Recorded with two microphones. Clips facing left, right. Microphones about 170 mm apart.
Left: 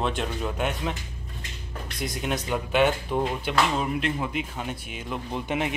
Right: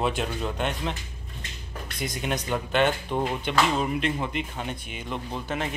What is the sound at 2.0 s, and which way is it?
Speech, centre (ahead or behind).